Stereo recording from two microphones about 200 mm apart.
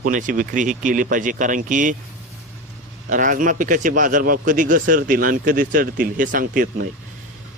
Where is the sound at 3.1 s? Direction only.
40° right (ahead or behind).